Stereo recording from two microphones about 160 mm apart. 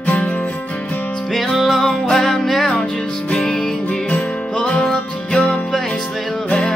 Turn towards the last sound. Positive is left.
turn(degrees=5)  # may be behind; listen again after turning